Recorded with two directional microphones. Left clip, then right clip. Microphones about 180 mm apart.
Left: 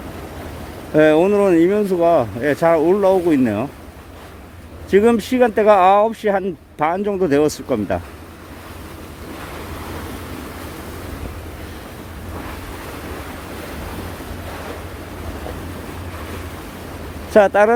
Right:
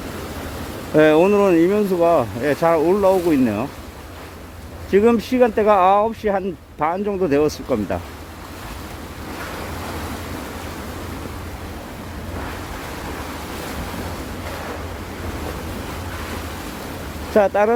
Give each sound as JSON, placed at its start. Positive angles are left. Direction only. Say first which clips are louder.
{"t": 0.9, "sound": "speech", "louder": "left 1 dB", "side_deg": 5}
{"t": 4.9, "sound": "speech", "louder": "left 1 dB", "side_deg": 15}
{"t": 17.3, "sound": "speech", "louder": "left 4 dB", "side_deg": 20}